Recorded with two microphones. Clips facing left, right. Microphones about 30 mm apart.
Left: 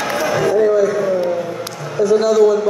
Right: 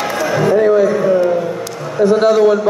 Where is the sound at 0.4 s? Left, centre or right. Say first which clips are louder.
Right 3 dB; right.